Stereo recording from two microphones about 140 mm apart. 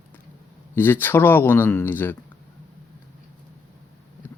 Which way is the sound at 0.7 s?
15° left (ahead or behind).